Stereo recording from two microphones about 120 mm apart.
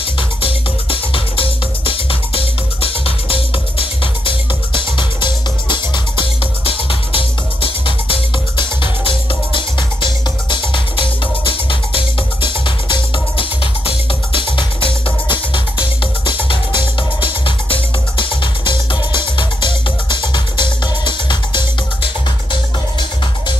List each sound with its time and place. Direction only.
0.0 s music: 50° left (ahead or behind)
17.5 s music: 45° left (ahead or behind)